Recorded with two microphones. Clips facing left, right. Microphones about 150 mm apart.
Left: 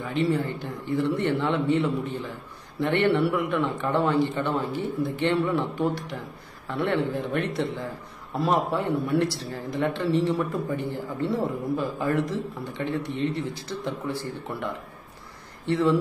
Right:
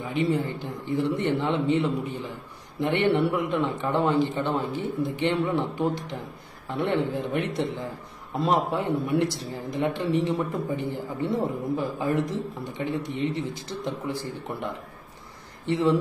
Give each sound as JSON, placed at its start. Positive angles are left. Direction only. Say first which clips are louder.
{"t": 0.0, "sound": "a man's voice", "louder": "even", "side_deg": -15}